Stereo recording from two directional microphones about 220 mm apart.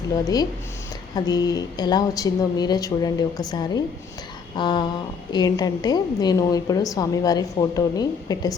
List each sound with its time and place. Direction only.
1.1 s a woman's voice: 20° left (ahead or behind)
4.5 s a sound: 20° left (ahead or behind)
5.3 s a woman's voice: 20° left (ahead or behind)